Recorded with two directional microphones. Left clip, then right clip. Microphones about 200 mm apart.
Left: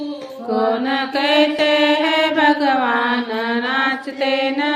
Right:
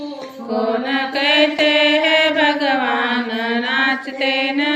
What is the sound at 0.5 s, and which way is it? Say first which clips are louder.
Mantra: left 1 dB; 40° left (ahead or behind).